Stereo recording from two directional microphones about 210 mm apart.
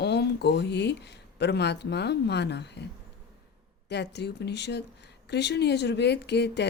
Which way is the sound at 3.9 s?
55° left (ahead or behind).